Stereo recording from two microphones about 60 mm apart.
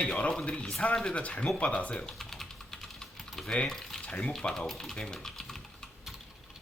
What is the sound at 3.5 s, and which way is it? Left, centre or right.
Speech, centre.